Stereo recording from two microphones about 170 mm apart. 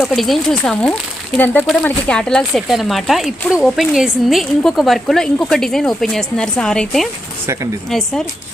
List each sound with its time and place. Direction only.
0.1 s a woman's voice: centre (ahead or behind)
7.4 s speech: 15° right (ahead or behind)
7.9 s a woman's voice: centre (ahead or behind)